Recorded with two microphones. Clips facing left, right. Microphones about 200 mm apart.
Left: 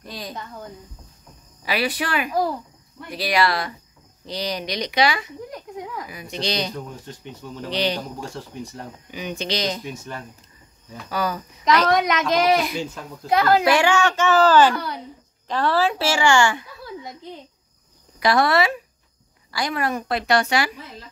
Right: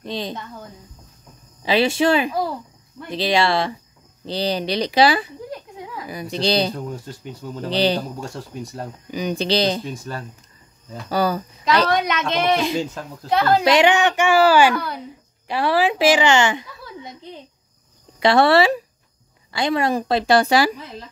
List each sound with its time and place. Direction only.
0.0 s speech: 25° right (ahead or behind)
1.6 s speech: 25° right (ahead or behind)
7.7 s a woman's voice: 30° right (ahead or behind)
9.1 s a woman's voice: 35° right (ahead or behind)
11.1 s a woman's voice: 35° right (ahead or behind)
18.2 s a woman's voice: 30° right (ahead or behind)